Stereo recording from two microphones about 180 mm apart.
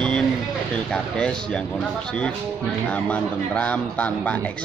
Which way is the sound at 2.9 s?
5° left (ahead or behind).